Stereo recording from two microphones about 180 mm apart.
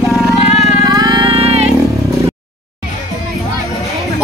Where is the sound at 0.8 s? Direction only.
20° right (ahead or behind).